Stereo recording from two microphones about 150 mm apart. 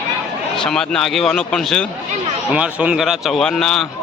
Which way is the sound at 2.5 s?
10° right (ahead or behind).